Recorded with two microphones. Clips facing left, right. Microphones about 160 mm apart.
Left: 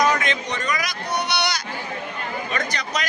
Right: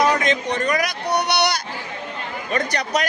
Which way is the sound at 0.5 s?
60° right (ahead or behind).